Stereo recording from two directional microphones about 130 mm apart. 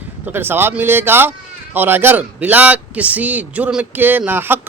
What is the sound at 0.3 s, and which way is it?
A man's voice, 15° right (ahead or behind).